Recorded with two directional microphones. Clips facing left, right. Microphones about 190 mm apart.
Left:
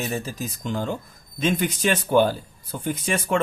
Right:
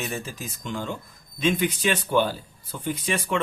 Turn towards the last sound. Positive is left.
turn(degrees=45)  # may be behind; listen again after turning